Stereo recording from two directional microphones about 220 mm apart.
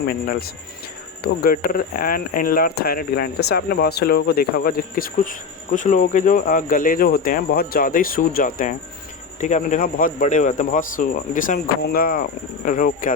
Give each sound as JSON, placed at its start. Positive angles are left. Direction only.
{"t": 0.1, "sound": "speech", "side_deg": 45}